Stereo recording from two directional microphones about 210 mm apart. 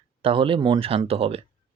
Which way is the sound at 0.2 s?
25° right (ahead or behind).